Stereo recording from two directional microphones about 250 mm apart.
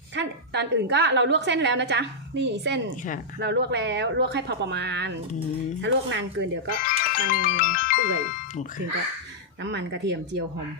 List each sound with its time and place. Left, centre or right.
0.2 s a woman's voice: right
6.7 s music: left
9.6 s a woman's voice: right